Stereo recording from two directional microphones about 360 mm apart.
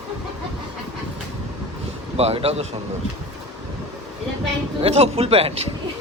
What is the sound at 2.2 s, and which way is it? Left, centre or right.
Speech, centre.